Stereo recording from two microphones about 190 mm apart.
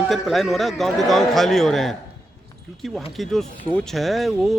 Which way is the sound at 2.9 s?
Centre (ahead or behind).